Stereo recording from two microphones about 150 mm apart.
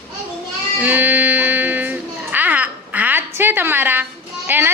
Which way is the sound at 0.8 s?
10° right (ahead or behind).